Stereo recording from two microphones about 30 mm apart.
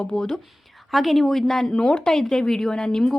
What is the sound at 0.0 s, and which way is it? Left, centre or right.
Speech, left.